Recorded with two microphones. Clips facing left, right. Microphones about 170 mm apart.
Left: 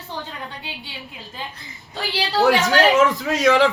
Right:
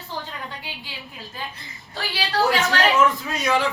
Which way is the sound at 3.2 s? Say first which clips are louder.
Left 6 dB; 90° left.